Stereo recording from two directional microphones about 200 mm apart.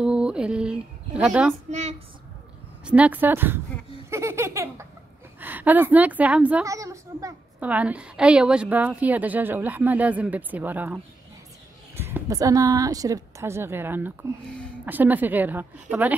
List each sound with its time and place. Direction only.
0.0 s speech: 5° right (ahead or behind)
1.7 s a woman's voice: 35° right (ahead or behind)
2.8 s a woman's voice: 5° right (ahead or behind)
4.1 s laughter: 15° right (ahead or behind)
5.4 s a woman's voice: 10° right (ahead or behind)
14.5 s speech: 5° left (ahead or behind)
14.9 s a woman's voice: 10° right (ahead or behind)